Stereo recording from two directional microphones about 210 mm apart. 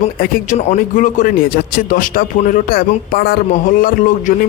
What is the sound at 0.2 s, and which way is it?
A man's voice, 40° left (ahead or behind).